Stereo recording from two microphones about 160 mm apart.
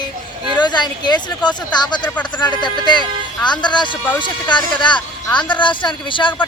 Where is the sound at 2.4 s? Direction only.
30° left (ahead or behind).